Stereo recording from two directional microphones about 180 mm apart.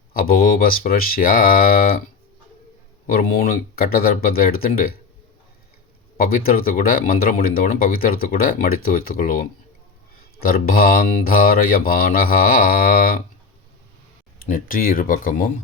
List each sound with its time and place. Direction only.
0.1 s speech: 55° left (ahead or behind)
3.1 s speech: 55° left (ahead or behind)
6.1 s speech: 55° left (ahead or behind)
10.4 s speech: 55° left (ahead or behind)
14.3 s speech: 50° left (ahead or behind)